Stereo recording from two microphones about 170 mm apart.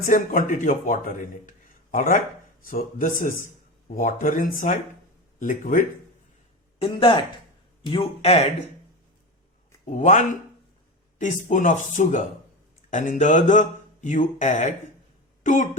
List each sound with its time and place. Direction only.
0.1 s a man's voice: 50° left (ahead or behind)
6.7 s speech: 35° left (ahead or behind)
9.9 s a man's voice: 45° left (ahead or behind)
11.2 s a man's voice: 50° left (ahead or behind)